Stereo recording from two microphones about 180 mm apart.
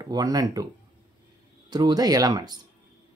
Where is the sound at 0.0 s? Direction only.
20° right (ahead or behind).